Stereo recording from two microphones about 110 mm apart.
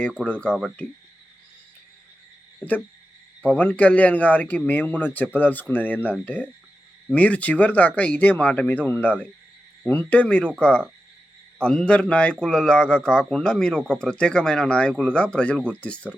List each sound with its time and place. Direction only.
0.3 s a man's voice: 10° left (ahead or behind)
3.4 s a man's voice: 15° left (ahead or behind)